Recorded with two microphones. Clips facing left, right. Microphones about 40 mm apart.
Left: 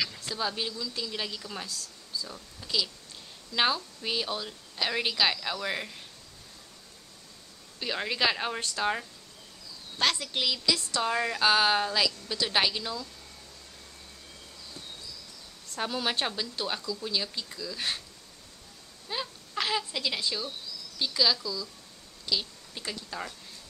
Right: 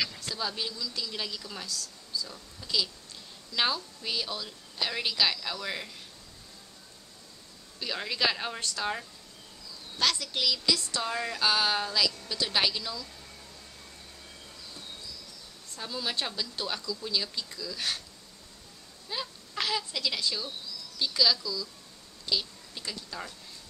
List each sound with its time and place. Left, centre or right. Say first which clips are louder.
0.2 s a woman's voice: left 2 dB; centre
7.8 s a woman's voice: left 2 dB; centre
9.9 s a woman's voice: left 1 dB; left
15.8 s a woman's voice: left 4 dB; left
16.3 s a woman's voice: left 2 dB; left
19.0 s a woman's voice: left 2 dB; centre